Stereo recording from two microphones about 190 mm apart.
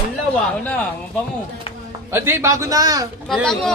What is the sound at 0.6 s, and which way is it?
Speech, 10° left (ahead or behind).